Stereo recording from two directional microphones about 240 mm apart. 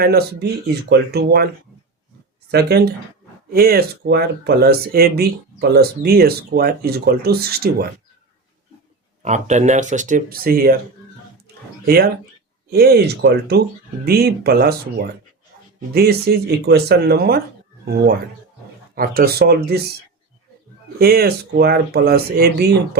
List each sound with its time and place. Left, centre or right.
0.0 s speech: right
2.5 s speech: right
9.2 s speech: right
12.7 s speech: right
18.9 s speech: right
21.0 s speech: right